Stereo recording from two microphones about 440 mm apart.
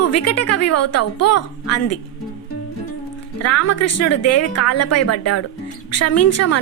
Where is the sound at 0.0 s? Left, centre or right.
Left.